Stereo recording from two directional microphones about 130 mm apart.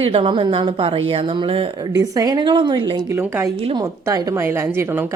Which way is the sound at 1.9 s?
25° right (ahead or behind).